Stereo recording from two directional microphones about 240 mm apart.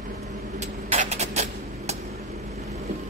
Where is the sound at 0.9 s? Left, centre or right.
Right.